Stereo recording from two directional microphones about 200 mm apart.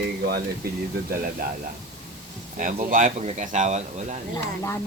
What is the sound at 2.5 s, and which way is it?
Speech, 45° right (ahead or behind).